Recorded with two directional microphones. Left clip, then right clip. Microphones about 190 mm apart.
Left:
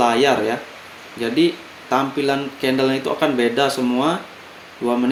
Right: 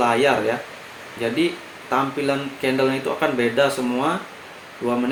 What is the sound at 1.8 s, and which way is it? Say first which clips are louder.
Speech: left 2 dB; 55° left (ahead or behind).